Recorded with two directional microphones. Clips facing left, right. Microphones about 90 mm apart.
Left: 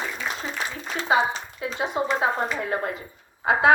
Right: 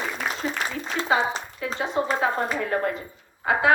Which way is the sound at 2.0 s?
15° left (ahead or behind).